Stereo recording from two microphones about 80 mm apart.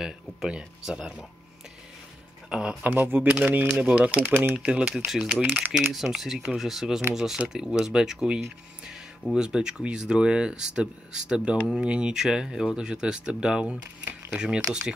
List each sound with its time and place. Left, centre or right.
0.0 s speech: centre
2.5 s speech: centre
2.8 s speech: right
3.3 s speech: centre
5.9 s speech: centre